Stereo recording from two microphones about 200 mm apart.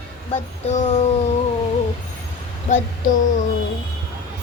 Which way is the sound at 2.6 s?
40° left (ahead or behind).